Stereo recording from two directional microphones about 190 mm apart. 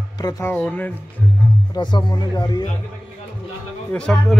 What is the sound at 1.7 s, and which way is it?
Speech, 25° left (ahead or behind).